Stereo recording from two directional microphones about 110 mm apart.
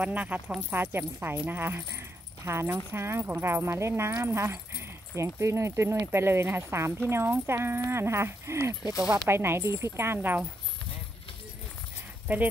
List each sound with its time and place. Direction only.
0.0 s speech: 15° right (ahead or behind)
12.3 s speech: 20° right (ahead or behind)